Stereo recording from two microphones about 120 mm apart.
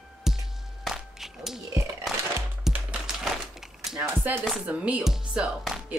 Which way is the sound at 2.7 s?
5° right (ahead or behind).